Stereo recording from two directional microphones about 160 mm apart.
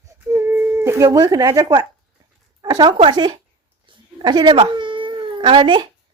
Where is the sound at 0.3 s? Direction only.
15° right (ahead or behind).